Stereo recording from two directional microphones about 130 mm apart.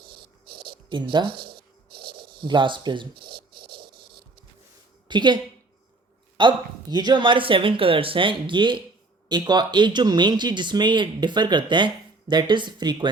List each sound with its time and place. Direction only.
0.9 s speech: 40° right (ahead or behind)
2.4 s speech: 40° right (ahead or behind)
5.0 s a woman's voice: 35° right (ahead or behind)
6.4 s speech: 35° right (ahead or behind)